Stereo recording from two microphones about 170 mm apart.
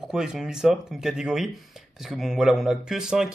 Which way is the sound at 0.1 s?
5° right (ahead or behind).